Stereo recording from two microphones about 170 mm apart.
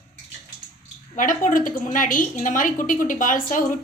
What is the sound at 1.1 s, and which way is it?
Speech, 50° left (ahead or behind).